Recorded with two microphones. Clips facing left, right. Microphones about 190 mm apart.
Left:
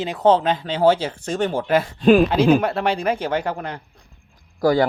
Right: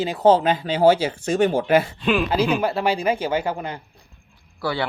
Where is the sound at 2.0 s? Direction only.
40° left (ahead or behind).